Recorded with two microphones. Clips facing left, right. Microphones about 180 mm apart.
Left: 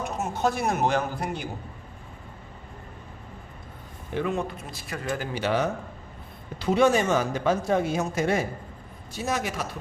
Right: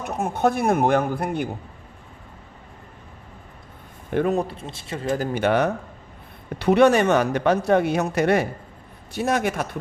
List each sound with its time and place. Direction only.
0.0 s speech: 55° right (ahead or behind)
4.3 s speech: 35° right (ahead or behind)
5.1 s speech: 45° right (ahead or behind)